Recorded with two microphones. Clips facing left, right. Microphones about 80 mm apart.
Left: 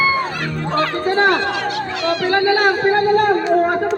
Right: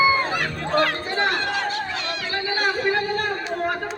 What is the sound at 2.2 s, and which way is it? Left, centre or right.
Music, left.